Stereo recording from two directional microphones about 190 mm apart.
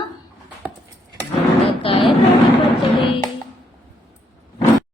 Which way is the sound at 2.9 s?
25° left (ahead or behind).